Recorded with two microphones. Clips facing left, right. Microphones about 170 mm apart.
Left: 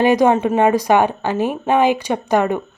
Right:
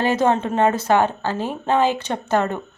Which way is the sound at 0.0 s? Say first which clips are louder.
Left 5 dB; 15° left (ahead or behind).